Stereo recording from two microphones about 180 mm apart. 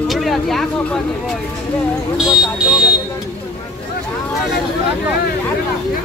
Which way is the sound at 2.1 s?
5° right (ahead or behind).